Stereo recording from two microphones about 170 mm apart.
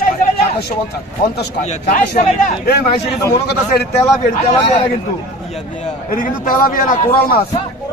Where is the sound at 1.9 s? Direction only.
50° left (ahead or behind).